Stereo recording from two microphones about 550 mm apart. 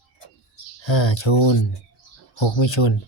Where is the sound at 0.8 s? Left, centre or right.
Left.